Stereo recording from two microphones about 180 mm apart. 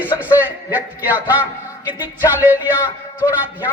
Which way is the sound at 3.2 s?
20° left (ahead or behind).